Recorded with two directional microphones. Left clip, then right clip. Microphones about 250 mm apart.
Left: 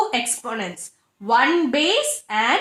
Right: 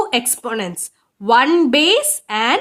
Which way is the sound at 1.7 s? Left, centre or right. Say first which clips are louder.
Right 5 dB; right.